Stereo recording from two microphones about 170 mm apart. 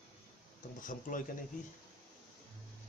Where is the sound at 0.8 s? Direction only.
50° left (ahead or behind).